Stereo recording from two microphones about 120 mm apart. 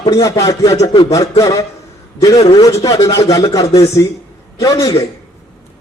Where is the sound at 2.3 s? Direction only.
55° left (ahead or behind).